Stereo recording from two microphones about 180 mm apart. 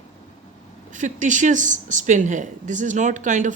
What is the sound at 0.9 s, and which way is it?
Speech, 45° right (ahead or behind).